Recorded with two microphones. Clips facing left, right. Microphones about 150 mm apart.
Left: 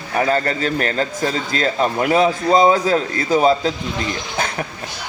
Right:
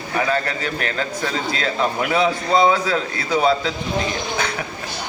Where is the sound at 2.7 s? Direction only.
40° left (ahead or behind).